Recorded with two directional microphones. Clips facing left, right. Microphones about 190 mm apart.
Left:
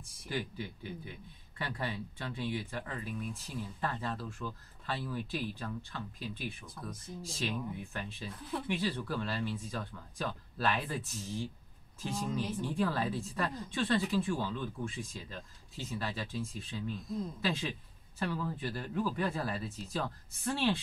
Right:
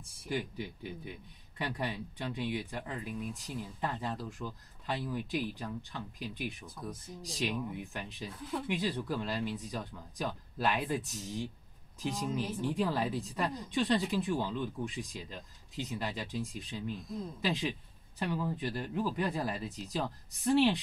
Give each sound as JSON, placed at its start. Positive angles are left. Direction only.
{"t": 1.6, "sound": "speech", "side_deg": -15}